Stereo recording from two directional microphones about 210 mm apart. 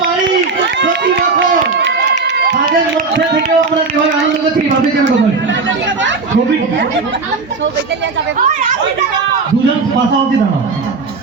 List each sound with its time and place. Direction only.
1.8 s run: 55° right (ahead or behind)
3.1 s a sound: 60° right (ahead or behind)
5.5 s chatter: 60° right (ahead or behind)